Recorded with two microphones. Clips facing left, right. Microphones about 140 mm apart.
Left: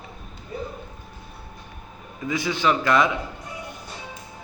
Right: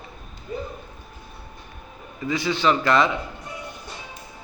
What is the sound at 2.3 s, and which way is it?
Speech, 10° left (ahead or behind).